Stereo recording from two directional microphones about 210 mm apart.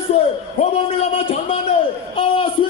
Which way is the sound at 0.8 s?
25° left (ahead or behind).